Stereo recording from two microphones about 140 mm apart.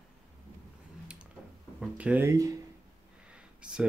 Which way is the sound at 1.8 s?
10° right (ahead or behind).